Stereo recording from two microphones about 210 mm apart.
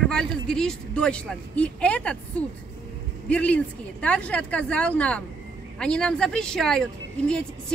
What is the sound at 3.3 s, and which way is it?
Speech, 5° left (ahead or behind).